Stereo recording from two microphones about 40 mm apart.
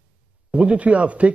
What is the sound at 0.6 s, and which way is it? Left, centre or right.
Speech, right.